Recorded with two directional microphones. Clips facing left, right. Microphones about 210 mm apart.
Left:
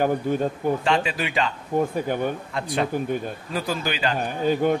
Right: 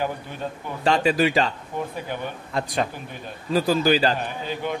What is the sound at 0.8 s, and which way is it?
Speech, 40° right (ahead or behind).